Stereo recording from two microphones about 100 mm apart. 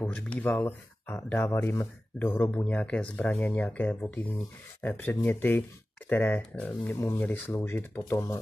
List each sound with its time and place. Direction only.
0.1 s speech: 15° left (ahead or behind)